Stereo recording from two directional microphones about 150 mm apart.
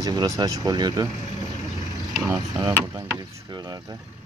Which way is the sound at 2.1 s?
20° right (ahead or behind).